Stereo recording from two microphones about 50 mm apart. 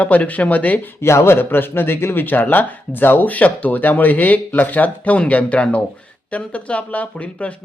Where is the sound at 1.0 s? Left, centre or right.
Left.